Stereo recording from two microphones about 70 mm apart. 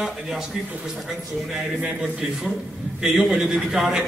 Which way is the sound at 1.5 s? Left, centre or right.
Centre.